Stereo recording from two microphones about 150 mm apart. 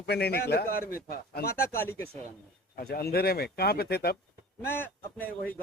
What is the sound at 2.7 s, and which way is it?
Speech, 90° left.